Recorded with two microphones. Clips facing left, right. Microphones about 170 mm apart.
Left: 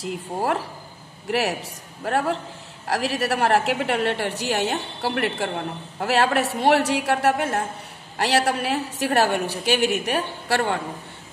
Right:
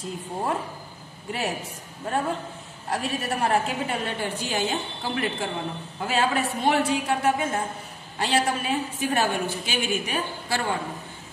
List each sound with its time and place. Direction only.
0.0 s a woman's voice: 80° left